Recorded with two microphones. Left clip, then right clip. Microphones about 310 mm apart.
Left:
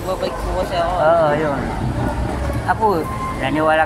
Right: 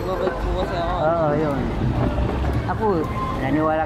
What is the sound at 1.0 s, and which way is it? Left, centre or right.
Speech, left.